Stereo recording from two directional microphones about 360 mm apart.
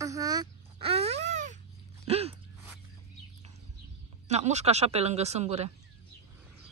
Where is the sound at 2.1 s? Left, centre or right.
Centre.